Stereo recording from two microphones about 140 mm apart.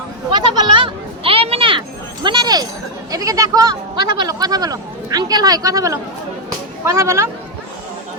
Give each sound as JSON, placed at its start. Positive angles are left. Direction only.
{"t": 0.3, "sound": "children playing", "side_deg": -30}
{"t": 2.2, "sound": "a sound", "side_deg": -30}
{"t": 3.1, "sound": "speech", "side_deg": -25}